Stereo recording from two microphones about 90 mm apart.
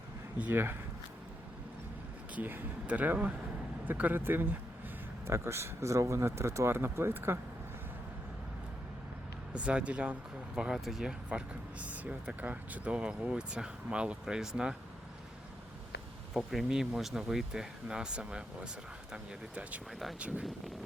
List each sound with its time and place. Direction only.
0.3 s speech: 20° right (ahead or behind)
2.3 s speech: 20° right (ahead or behind)
9.5 s speech: 10° right (ahead or behind)
16.4 s speech: centre (ahead or behind)
19.9 s speech: centre (ahead or behind)
20.1 s speech: 15° right (ahead or behind)